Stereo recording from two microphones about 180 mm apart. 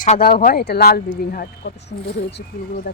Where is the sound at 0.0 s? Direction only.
50° left (ahead or behind).